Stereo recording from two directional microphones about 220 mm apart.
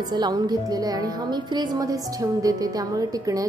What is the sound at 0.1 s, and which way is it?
A woman's voice, 20° right (ahead or behind).